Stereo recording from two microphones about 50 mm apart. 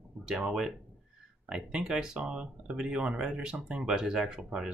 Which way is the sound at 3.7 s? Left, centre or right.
Centre.